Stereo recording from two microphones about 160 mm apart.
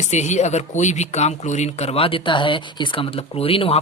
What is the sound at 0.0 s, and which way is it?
Speech, 45° left (ahead or behind).